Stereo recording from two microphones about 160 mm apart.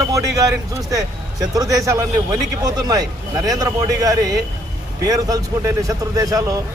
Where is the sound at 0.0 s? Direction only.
20° right (ahead or behind).